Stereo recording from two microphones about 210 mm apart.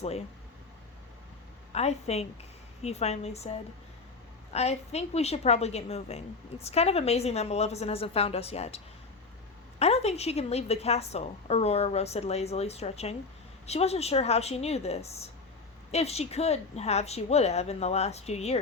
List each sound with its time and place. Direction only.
0.0 s a woman's voice: 30° left (ahead or behind)
1.7 s a woman's voice: 30° left (ahead or behind)
4.5 s a woman's voice: 30° left (ahead or behind)